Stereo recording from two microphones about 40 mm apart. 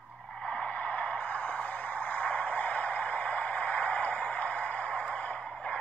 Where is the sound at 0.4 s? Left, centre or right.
Left.